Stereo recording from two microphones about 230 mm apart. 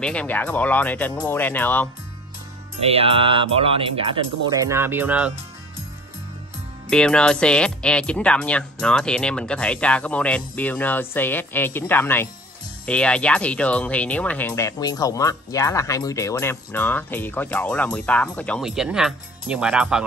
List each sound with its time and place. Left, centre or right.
0.0 s speech: centre
2.8 s speech: right; by 5.3 s centre
6.9 s speech: centre